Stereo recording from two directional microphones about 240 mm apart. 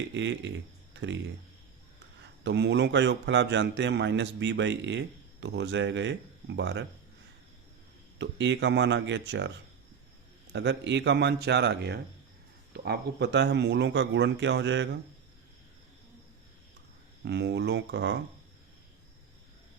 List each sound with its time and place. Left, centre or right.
0.1 s speech: right
2.4 s a man's voice: right
8.2 s a man's voice: right
10.5 s a man's voice: right
17.2 s a man's voice: right